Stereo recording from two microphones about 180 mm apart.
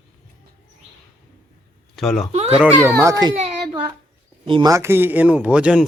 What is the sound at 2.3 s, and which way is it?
Speech, 35° right (ahead or behind).